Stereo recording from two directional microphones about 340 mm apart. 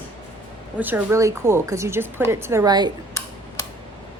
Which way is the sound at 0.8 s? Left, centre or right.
Centre.